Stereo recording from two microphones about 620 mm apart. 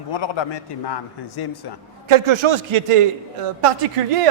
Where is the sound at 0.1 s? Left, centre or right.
Left.